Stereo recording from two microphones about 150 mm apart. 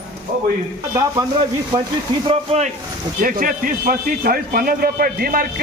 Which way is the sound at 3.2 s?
65° right (ahead or behind).